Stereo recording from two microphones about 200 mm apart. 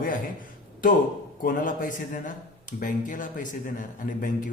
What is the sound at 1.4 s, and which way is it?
Speech, 45° left (ahead or behind).